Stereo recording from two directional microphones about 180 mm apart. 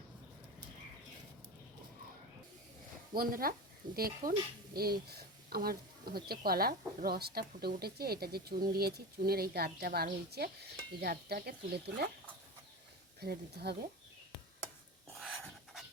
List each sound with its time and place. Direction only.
3.2 s speech: 55° right (ahead or behind)
13.1 s speech: 60° right (ahead or behind)
15.1 s a sound: 5° right (ahead or behind)